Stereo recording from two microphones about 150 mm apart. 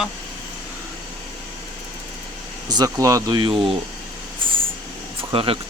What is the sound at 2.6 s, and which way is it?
Speech, 25° right (ahead or behind).